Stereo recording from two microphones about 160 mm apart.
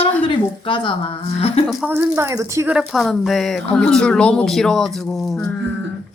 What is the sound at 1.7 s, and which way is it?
Speech, 10° right (ahead or behind).